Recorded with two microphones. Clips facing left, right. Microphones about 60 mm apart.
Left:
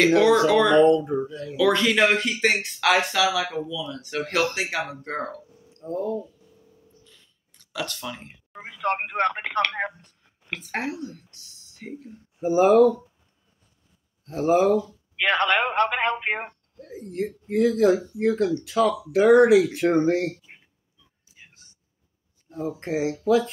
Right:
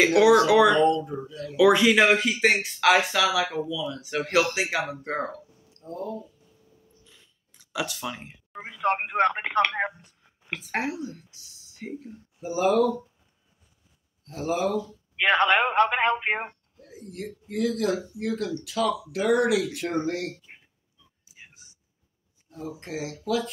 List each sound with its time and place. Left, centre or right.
0.5 s speech: centre
0.8 s speech: left
1.6 s speech: centre
5.7 s speech: left
7.1 s a sound: centre
9.7 s speech: centre
12.4 s speech: left
14.2 s speech: left
15.1 s speech: centre
16.8 s speech: left
21.3 s whispering: centre
22.5 s speech: left